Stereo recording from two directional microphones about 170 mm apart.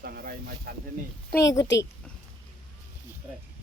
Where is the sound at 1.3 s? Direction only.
20° left (ahead or behind).